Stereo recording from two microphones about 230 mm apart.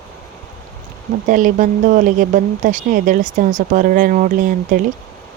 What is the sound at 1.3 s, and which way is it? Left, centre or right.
Speech, right.